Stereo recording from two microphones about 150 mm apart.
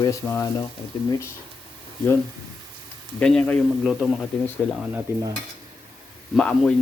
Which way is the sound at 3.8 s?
Centre (ahead or behind).